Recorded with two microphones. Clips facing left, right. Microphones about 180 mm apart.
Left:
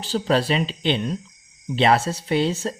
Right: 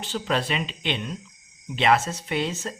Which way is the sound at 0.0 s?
35° left (ahead or behind).